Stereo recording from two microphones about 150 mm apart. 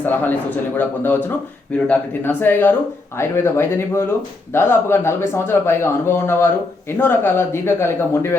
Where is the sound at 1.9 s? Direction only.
15° left (ahead or behind).